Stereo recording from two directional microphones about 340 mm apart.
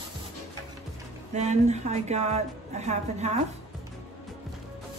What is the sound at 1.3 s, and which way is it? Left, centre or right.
A woman's voice, centre.